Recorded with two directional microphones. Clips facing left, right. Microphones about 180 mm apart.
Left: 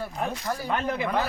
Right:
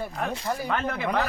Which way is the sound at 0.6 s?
15° left (ahead or behind).